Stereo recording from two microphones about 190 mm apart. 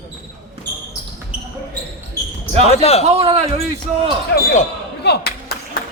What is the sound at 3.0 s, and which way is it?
Speech, 35° right (ahead or behind).